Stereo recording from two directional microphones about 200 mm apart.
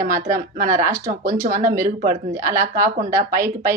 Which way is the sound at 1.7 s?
40° right (ahead or behind).